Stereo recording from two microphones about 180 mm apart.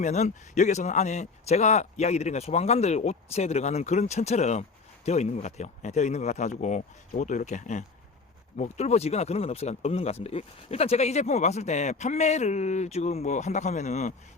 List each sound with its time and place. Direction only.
0.0 s speech: 40° left (ahead or behind)